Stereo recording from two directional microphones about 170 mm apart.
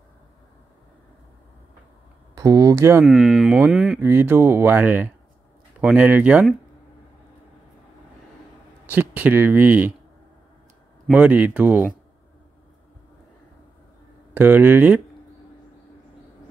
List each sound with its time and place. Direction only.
2.3 s speech: 20° right (ahead or behind)
3.1 s speech: centre (ahead or behind)
4.0 s speech: 15° right (ahead or behind)
8.8 s speech: 10° right (ahead or behind)
11.1 s speech: 10° right (ahead or behind)
14.3 s speech: 10° right (ahead or behind)